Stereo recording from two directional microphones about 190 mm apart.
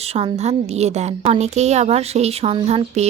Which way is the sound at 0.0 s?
30° right (ahead or behind).